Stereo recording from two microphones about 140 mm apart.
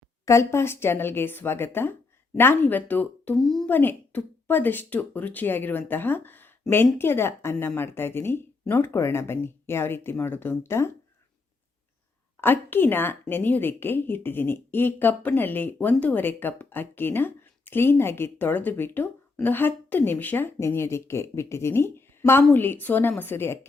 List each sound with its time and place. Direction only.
0.3 s a woman's voice: 20° left (ahead or behind)
3.4 s speech: centre (ahead or behind)
3.7 s a woman's voice: 15° left (ahead or behind)
12.4 s a woman's voice: 15° left (ahead or behind)